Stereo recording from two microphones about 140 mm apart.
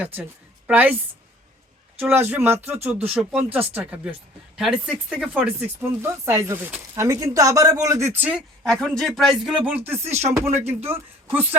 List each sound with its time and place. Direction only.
0.0 s speech: 15° right (ahead or behind)
2.0 s speech: 15° right (ahead or behind)
8.6 s a man's voice: 5° left (ahead or behind)
9.6 s speech: 15° right (ahead or behind)
10.0 s music: 50° right (ahead or behind)
10.8 s speech: 15° right (ahead or behind)